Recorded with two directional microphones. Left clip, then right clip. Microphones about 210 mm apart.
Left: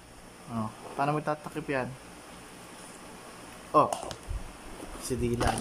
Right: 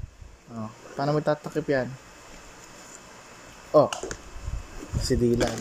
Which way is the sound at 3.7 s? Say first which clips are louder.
Right 4 dB; 5° right (ahead or behind).